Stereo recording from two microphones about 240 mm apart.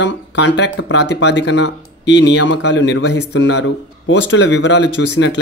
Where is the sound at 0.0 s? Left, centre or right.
Left.